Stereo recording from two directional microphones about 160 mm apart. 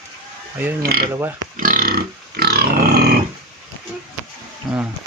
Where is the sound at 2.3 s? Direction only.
75° right (ahead or behind).